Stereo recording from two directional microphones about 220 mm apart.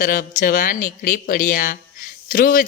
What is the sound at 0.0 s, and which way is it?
Speech, 40° left (ahead or behind).